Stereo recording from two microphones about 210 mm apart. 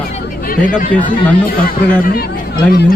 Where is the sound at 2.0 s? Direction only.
45° left (ahead or behind).